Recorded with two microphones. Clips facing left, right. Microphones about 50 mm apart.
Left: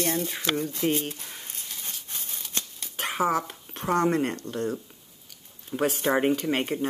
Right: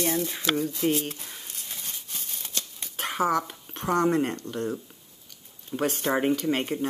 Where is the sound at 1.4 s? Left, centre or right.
Left.